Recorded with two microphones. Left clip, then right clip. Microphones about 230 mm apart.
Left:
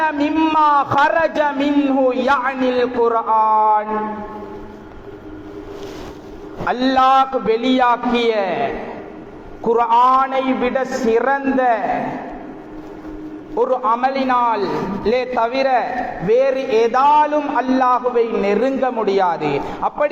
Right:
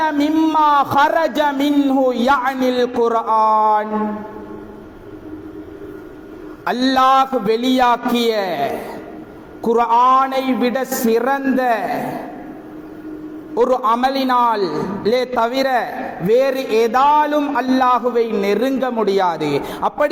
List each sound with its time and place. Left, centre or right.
0.0 s a sound: right
6.7 s a man's voice: right
9.6 s a man's voice: right
13.6 s a man's voice: right